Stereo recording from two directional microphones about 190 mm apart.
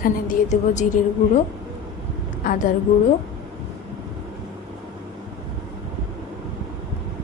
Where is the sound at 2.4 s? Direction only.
45° left (ahead or behind).